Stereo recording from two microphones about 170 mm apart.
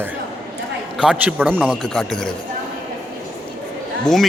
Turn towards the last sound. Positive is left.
turn(degrees=0)  # may be behind; listen again after turning